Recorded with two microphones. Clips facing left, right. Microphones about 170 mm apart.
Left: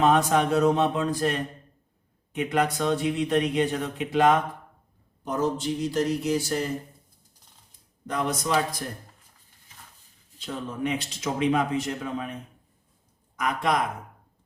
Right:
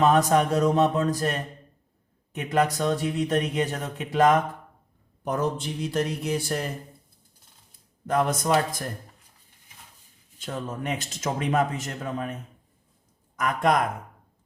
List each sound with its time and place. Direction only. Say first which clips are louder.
0.0 s speech: right 1 dB; 40° right (ahead or behind)
5.2 s speech: left 1 dB; 55° right (ahead or behind)
8.0 s a man's voice: right 4 dB; 50° right (ahead or behind)
10.4 s a man's voice: left 1 dB; 45° right (ahead or behind)